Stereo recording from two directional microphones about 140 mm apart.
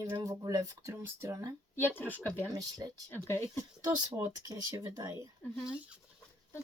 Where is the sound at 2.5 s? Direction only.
25° right (ahead or behind).